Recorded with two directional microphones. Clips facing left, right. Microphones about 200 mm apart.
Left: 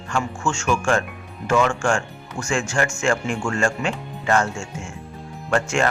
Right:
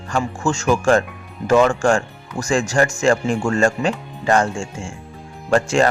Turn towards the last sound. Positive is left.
turn(degrees=-35)  # may be behind; listen again after turning